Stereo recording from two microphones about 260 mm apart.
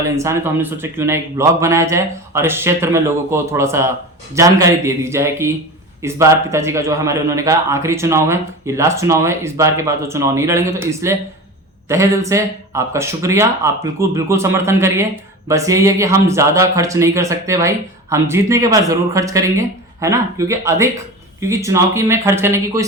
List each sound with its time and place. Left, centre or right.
0.0 s speech: centre